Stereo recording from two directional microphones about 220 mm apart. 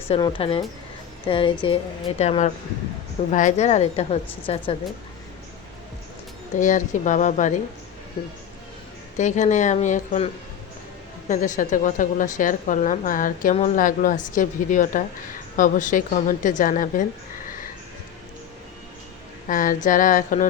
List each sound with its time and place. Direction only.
0.1 s a woman's voice: 20° left (ahead or behind)
6.6 s a woman's voice: 35° left (ahead or behind)
9.1 s a woman's voice: 35° left (ahead or behind)
11.3 s a woman's voice: 35° left (ahead or behind)
19.5 s a woman's voice: 35° left (ahead or behind)